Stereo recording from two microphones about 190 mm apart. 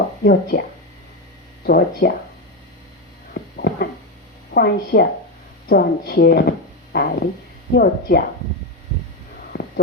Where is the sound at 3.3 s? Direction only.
55° left (ahead or behind).